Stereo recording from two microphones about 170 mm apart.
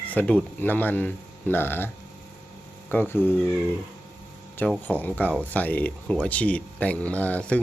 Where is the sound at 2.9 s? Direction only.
10° left (ahead or behind).